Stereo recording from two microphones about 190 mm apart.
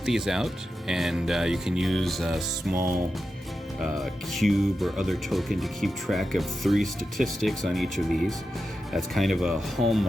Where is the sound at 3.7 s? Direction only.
Centre (ahead or behind).